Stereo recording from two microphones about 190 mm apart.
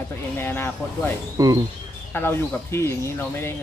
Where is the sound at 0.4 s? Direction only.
10° left (ahead or behind).